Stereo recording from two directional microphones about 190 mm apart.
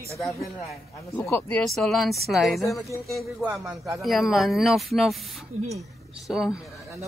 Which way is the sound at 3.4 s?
15° right (ahead or behind).